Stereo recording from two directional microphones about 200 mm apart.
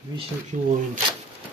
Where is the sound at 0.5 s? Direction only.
35° right (ahead or behind).